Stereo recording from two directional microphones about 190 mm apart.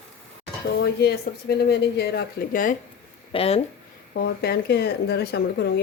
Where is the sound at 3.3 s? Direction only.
30° left (ahead or behind).